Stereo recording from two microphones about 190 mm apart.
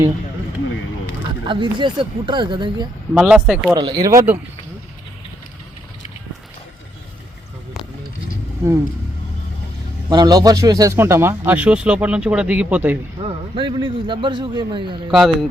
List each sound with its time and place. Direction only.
1.5 s a man's voice: 25° right (ahead or behind)
3.2 s speech: 5° right (ahead or behind)
3.8 s speech: 20° right (ahead or behind)
10.1 s speech: 20° right (ahead or behind)
13.1 s a man's voice: 25° right (ahead or behind)
15.1 s speech: centre (ahead or behind)